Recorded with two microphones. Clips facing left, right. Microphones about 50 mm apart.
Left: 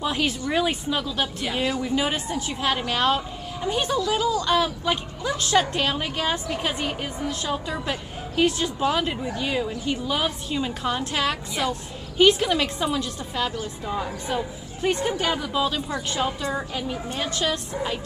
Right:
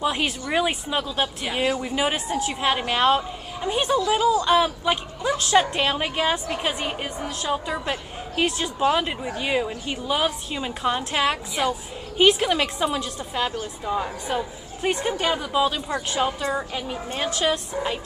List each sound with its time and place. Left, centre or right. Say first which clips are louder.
0.0 s a woman's voice: even; centre
1.6 s a woman's voice: right 1 dB; right
6.6 s a woman's voice: even; centre
10.0 s a woman's voice: right 7 dB; centre